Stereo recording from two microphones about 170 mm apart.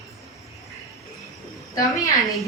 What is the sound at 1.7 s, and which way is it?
Speech, 20° left (ahead or behind).